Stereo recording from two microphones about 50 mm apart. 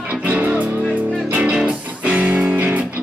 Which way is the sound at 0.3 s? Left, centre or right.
Right.